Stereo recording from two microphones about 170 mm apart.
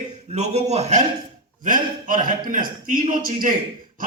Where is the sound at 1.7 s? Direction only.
50° right (ahead or behind).